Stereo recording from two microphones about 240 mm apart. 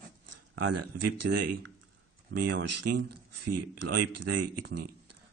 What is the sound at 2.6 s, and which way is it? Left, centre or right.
Speech, right.